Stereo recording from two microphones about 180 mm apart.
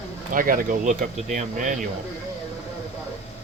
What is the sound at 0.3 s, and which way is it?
Speech, 50° right (ahead or behind).